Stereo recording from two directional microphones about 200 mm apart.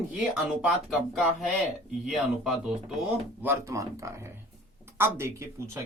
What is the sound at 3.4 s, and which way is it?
Speech, 15° right (ahead or behind).